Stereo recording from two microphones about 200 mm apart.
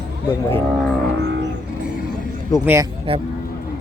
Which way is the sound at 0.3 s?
10° left (ahead or behind).